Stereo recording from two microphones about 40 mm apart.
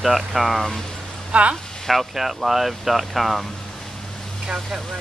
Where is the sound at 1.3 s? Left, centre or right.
Right.